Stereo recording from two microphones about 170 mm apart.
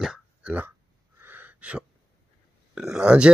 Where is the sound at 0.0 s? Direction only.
5° right (ahead or behind).